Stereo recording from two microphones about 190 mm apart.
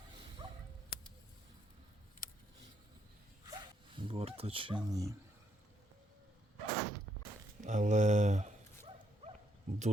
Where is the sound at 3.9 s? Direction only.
30° right (ahead or behind).